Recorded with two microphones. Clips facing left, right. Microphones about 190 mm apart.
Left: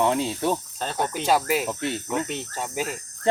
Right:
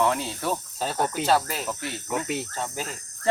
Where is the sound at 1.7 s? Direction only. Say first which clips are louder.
Left 4 dB; 25° left (ahead or behind).